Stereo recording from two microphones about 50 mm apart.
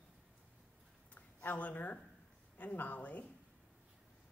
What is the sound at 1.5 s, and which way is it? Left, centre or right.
A woman's voice, left.